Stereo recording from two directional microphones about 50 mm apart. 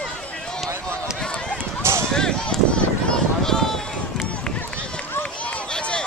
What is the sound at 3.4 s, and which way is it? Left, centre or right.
Run, centre.